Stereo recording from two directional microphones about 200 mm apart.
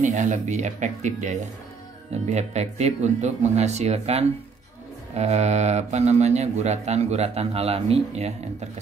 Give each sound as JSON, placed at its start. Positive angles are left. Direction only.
{"t": 0.0, "sound": "a man's voice", "side_deg": -40}